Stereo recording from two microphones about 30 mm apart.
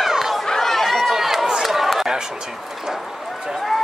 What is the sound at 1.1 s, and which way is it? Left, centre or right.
Run, centre.